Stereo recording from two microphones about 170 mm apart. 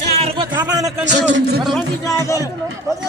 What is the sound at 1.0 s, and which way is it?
Speech, 90° right.